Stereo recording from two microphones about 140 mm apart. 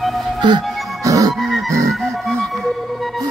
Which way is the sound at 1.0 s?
25° right (ahead or behind).